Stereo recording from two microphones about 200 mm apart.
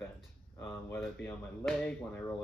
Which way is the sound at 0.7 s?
10° left (ahead or behind).